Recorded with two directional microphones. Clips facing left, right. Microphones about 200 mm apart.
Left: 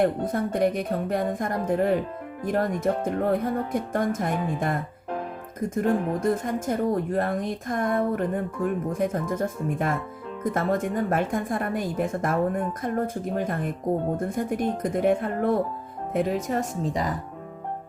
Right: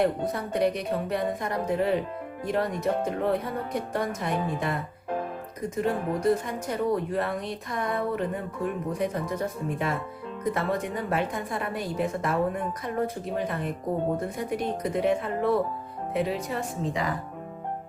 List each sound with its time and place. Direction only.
0.0 s a woman's voice: 50° left (ahead or behind)